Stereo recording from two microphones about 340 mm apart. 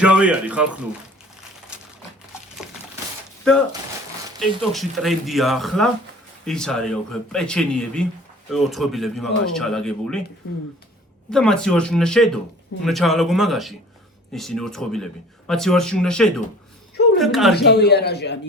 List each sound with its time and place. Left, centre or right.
0.0 s speech: centre
3.5 s speech: centre
11.3 s speech: centre
17.5 s a man's voice: left